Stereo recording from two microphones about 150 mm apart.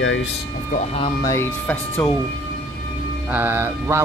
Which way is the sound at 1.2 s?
20° left (ahead or behind).